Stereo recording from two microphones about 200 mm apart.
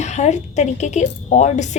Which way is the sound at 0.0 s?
35° left (ahead or behind).